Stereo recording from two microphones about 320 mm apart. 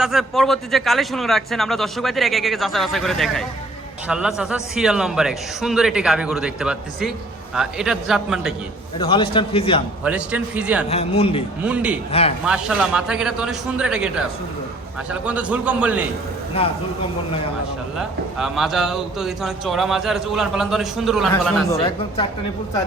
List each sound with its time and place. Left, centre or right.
0.0 s a man's voice: centre
9.0 s a man's voice: centre
10.0 s a man's voice: centre
10.8 s a man's voice: centre
11.6 s a man's voice: centre
15.1 s a man's voice: centre
17.9 s a man's voice: centre
21.8 s a man's voice: centre